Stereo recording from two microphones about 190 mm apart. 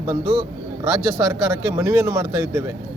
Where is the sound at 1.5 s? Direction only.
15° right (ahead or behind).